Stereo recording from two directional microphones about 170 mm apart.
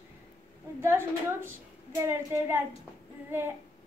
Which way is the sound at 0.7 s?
15° right (ahead or behind).